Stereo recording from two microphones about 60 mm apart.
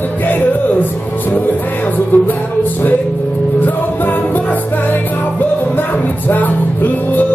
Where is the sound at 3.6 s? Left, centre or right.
Left.